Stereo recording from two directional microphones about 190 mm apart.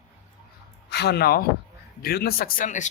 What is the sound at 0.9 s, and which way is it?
Speech, 60° left (ahead or behind).